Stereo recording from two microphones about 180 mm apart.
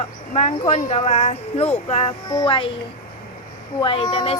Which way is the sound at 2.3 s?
25° left (ahead or behind).